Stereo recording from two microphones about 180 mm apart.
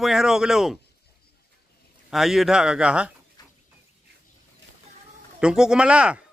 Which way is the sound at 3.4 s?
20° left (ahead or behind).